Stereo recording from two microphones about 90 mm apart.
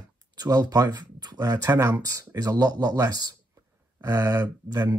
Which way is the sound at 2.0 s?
40° right (ahead or behind).